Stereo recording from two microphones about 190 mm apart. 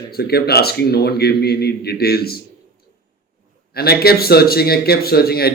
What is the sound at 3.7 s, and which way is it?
A man's voice, 55° left (ahead or behind).